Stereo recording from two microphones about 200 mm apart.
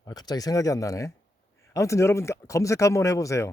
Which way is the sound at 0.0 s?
20° left (ahead or behind).